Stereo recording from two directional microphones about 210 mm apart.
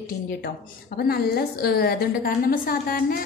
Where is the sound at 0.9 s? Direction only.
45° left (ahead or behind).